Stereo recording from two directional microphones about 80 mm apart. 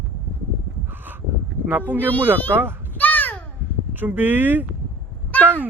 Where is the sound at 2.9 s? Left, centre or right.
Left.